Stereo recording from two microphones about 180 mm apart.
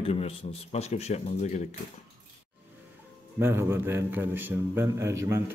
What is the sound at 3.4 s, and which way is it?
A man's voice, 15° right (ahead or behind).